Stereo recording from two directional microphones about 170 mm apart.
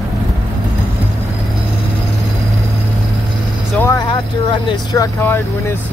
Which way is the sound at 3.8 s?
15° left (ahead or behind).